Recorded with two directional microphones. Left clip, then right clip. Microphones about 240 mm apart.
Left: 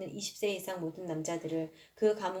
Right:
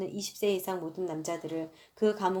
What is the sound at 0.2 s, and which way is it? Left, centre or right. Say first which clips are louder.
A woman's voice: right 4 dB; right.